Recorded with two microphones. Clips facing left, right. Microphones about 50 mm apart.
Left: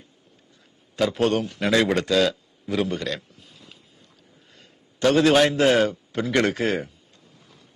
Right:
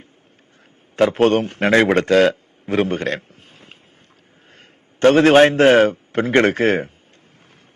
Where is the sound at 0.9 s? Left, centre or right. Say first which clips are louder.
Right 7 dB; right.